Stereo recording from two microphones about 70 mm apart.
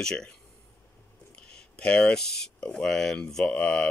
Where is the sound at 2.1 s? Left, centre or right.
Centre.